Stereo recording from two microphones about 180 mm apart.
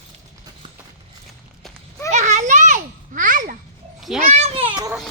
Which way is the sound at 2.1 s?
40° right (ahead or behind).